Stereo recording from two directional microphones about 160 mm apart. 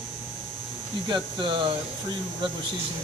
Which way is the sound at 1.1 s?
30° right (ahead or behind).